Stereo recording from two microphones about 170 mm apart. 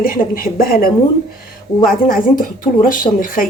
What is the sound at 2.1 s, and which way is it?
Speech, 55° left (ahead or behind).